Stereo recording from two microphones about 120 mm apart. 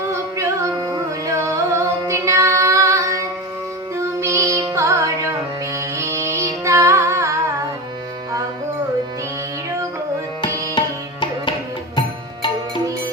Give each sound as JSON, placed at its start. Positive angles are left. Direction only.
{"t": 0.1, "sound": "music", "side_deg": -25}
{"t": 10.4, "sound": "tabla", "side_deg": 40}
{"t": 11.9, "sound": "music", "side_deg": 40}